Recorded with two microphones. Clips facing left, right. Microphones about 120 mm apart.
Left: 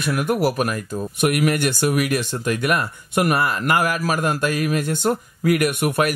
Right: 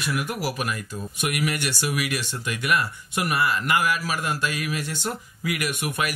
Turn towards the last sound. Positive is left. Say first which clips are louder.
# left 8 dB
turn(degrees=50)  # may be behind; listen again after turning